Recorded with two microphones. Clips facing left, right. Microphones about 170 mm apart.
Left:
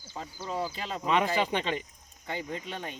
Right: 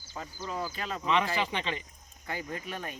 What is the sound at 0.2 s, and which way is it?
Speech, 30° left (ahead or behind).